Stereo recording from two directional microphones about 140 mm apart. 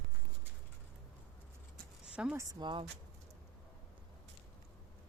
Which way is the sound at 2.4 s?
30° right (ahead or behind).